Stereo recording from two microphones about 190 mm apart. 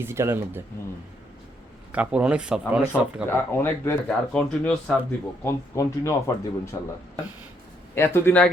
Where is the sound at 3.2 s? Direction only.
10° left (ahead or behind).